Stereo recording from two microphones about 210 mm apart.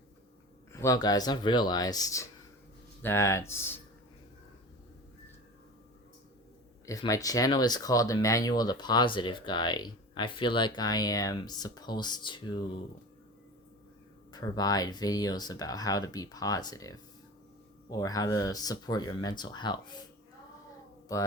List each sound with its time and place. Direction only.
0.7 s speech: 15° left (ahead or behind)
6.8 s speech: 15° left (ahead or behind)
14.3 s speech: 20° left (ahead or behind)